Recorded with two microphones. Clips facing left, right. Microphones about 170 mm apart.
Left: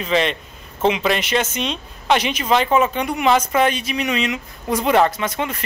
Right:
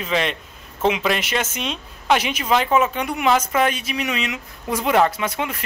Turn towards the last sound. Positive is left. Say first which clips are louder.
# left 1 dB
turn(degrees=-10)  # may be behind; listen again after turning